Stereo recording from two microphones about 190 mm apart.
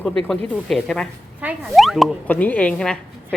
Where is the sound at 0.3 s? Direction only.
5° left (ahead or behind).